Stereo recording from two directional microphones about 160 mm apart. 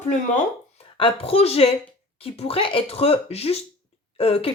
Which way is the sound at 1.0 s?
35° left (ahead or behind).